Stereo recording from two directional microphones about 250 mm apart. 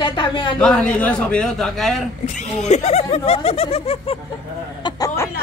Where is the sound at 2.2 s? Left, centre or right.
Left.